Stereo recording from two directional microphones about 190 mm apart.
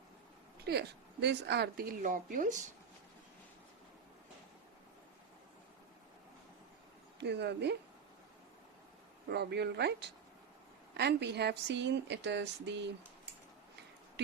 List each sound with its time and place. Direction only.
0.6 s a woman's voice: 60° right (ahead or behind); by 2.6 s 40° right (ahead or behind)
7.2 s speech: 60° right (ahead or behind)
9.3 s speech: 60° right (ahead or behind)